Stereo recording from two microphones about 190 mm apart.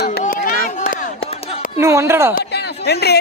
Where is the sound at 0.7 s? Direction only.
40° left (ahead or behind).